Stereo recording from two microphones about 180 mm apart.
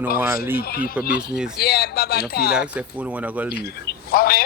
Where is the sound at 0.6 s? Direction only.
55° left (ahead or behind).